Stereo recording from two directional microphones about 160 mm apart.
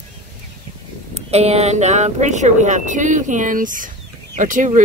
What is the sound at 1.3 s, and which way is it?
Speech, 40° right (ahead or behind).